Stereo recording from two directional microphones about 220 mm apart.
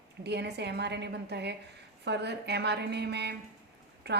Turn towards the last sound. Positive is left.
turn(degrees=-50)  # may be behind; listen again after turning